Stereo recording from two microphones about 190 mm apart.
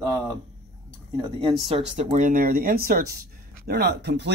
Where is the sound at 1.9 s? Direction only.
40° right (ahead or behind).